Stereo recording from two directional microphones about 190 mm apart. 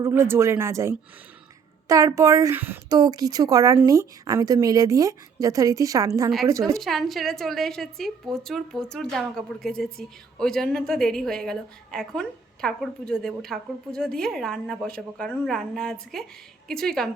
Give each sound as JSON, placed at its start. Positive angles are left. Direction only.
{"t": 0.0, "sound": "a woman's voice", "side_deg": -15}
{"t": 6.7, "sound": "a woman's voice", "side_deg": 0}